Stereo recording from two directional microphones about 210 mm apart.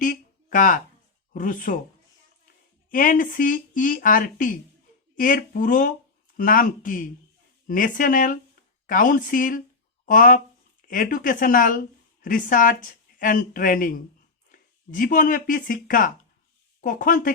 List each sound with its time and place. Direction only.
0.0 s a sound: 40° left (ahead or behind)
1.3 s speech: 40° left (ahead or behind)
2.9 s speech: 40° left (ahead or behind)